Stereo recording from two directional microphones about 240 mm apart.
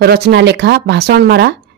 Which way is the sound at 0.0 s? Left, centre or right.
Right.